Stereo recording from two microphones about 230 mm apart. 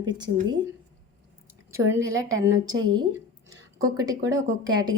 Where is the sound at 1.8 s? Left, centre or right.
Right.